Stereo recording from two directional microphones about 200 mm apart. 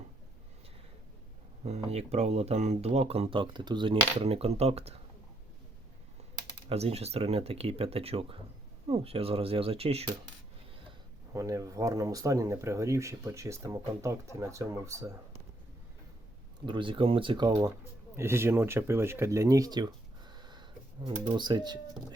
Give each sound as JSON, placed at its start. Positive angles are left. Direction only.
{"t": 1.6, "sound": "speech", "side_deg": -30}
{"t": 6.7, "sound": "speech", "side_deg": -30}
{"t": 11.3, "sound": "speech", "side_deg": -15}
{"t": 16.6, "sound": "speech", "side_deg": -25}